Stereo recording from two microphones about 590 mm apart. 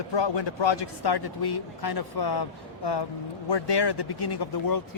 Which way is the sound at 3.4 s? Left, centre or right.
Left.